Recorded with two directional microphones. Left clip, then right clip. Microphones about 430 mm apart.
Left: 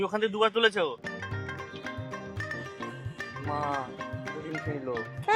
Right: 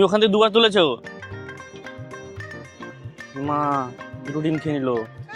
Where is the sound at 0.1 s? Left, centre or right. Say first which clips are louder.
Right 10 dB; right.